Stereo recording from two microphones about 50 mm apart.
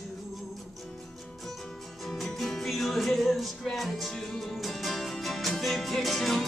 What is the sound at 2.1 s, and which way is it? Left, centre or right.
Music, centre.